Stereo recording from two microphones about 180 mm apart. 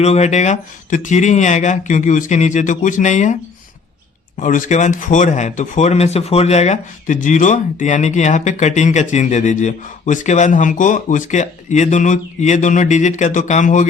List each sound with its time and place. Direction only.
0.0 s speech: 40° left (ahead or behind)
4.4 s speech: 45° left (ahead or behind)